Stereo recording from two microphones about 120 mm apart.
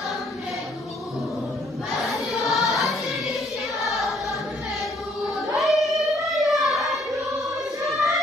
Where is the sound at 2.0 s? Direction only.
Centre (ahead or behind).